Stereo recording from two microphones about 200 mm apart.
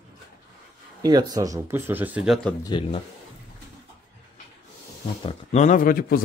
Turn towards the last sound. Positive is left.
turn(degrees=45)  # may be behind; listen again after turning